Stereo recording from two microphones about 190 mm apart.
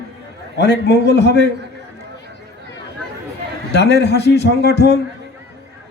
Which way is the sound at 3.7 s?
60° left (ahead or behind).